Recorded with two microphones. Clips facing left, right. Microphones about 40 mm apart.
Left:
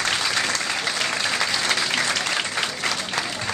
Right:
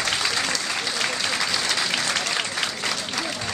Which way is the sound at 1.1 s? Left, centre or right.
Centre.